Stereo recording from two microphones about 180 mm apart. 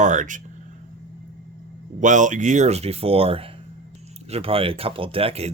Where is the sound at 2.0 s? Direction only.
45° right (ahead or behind).